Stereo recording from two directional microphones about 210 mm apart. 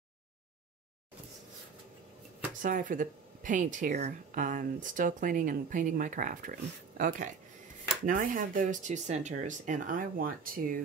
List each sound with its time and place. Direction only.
2.6 s speech: 40° right (ahead or behind)